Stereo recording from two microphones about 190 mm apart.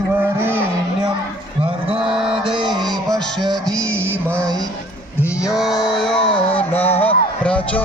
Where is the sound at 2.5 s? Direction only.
25° right (ahead or behind).